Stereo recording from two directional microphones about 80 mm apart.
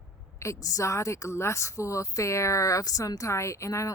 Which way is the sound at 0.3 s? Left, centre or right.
Left.